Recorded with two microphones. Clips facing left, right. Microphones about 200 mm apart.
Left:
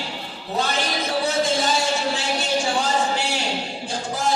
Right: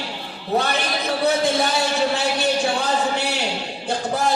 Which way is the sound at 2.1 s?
60° right (ahead or behind).